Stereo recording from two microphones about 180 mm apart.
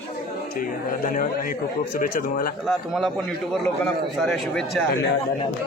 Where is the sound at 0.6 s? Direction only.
50° left (ahead or behind).